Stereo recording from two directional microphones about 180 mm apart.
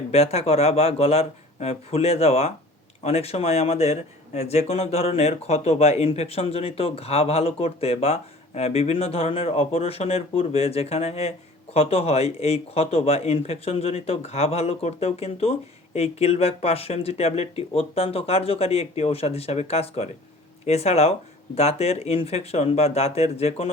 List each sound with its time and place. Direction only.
0.1 s speech: 35° left (ahead or behind)